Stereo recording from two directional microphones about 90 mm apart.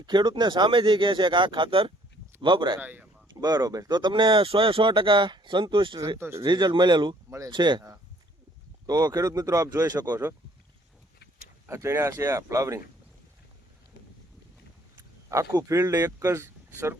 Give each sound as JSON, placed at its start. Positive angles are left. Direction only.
{"t": 0.0, "sound": "speech", "side_deg": -55}
{"t": 2.4, "sound": "speech", "side_deg": -60}
{"t": 2.8, "sound": "speech", "side_deg": -15}
{"t": 3.4, "sound": "speech", "side_deg": -45}
{"t": 6.1, "sound": "speech", "side_deg": -30}
{"t": 6.4, "sound": "speech", "side_deg": -55}
{"t": 7.3, "sound": "speech", "side_deg": -40}
{"t": 7.5, "sound": "speech", "side_deg": -55}
{"t": 11.6, "sound": "speech", "side_deg": -30}
{"t": 14.9, "sound": "speech", "side_deg": -35}